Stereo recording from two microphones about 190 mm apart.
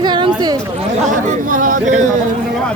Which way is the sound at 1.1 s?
45° right (ahead or behind).